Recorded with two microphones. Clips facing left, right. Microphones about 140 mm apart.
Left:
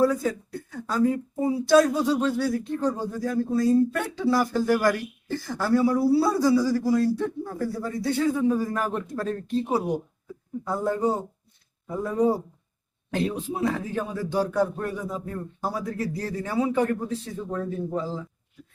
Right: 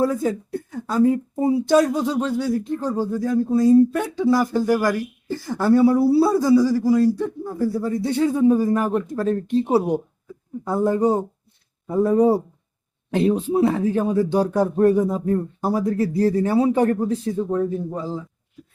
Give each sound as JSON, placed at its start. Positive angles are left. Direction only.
{"t": 0.1, "sound": "speech", "side_deg": -20}
{"t": 1.7, "sound": "a man's voice", "side_deg": -15}
{"t": 6.4, "sound": "a man's voice", "side_deg": -15}
{"t": 11.9, "sound": "a man's voice", "side_deg": -30}
{"t": 17.6, "sound": "speech", "side_deg": -15}